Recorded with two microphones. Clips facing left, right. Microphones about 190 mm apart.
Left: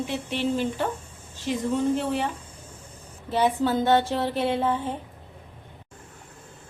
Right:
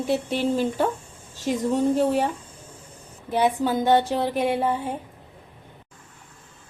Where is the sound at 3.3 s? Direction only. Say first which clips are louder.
Right 1 dB; 15° right (ahead or behind).